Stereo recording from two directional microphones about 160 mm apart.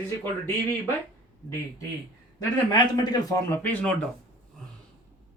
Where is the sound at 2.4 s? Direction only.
25° left (ahead or behind).